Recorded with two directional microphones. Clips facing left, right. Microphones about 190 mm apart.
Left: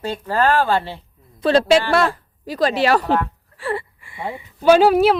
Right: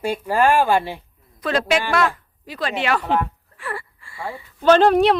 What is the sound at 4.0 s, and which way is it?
Speech, 20° left (ahead or behind).